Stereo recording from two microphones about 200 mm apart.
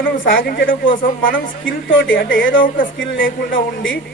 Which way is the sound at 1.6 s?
70° left (ahead or behind).